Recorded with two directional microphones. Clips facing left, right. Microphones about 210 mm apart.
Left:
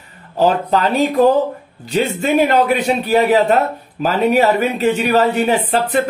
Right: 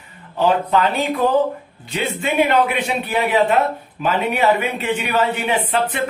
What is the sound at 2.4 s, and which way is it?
Speech, 40° left (ahead or behind).